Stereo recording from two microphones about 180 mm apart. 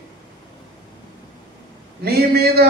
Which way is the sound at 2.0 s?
60° right (ahead or behind).